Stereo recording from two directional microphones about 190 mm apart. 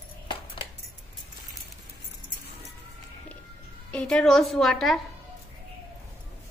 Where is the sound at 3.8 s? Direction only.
5° left (ahead or behind).